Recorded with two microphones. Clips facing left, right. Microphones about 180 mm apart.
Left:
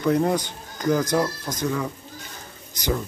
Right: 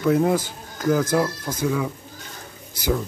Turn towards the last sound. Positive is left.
turn(degrees=-5)  # may be behind; listen again after turning